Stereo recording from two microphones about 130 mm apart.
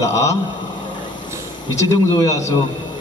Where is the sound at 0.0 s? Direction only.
25° left (ahead or behind).